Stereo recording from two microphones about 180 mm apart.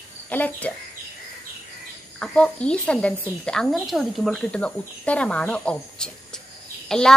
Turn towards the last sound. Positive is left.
turn(degrees=5)  # may be behind; listen again after turning